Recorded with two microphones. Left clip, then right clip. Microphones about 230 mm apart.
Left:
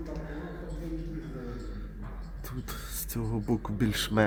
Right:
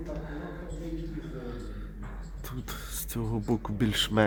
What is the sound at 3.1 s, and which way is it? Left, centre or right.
A man's voice, centre.